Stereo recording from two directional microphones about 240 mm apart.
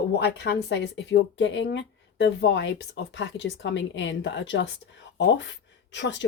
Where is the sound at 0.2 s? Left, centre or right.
Left.